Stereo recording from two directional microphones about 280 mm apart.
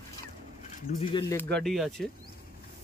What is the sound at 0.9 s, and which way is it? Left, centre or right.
Speech, left.